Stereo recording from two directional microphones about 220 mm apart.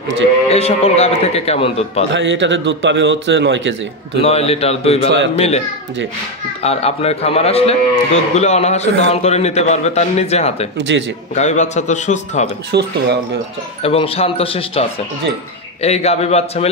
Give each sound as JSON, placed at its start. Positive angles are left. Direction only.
{"t": 0.5, "sound": "a man's voice", "side_deg": 30}
{"t": 2.1, "sound": "a man's voice", "side_deg": -55}
{"t": 4.2, "sound": "a man's voice", "side_deg": 30}
{"t": 6.6, "sound": "a man's voice", "side_deg": 30}
{"t": 10.8, "sound": "a man's voice", "side_deg": -55}
{"t": 11.3, "sound": "a man's voice", "side_deg": 30}
{"t": 12.7, "sound": "speech", "side_deg": -50}
{"t": 13.8, "sound": "a man's voice", "side_deg": 25}